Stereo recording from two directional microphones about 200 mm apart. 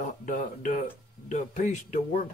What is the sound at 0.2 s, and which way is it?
Speech, 40° left (ahead or behind).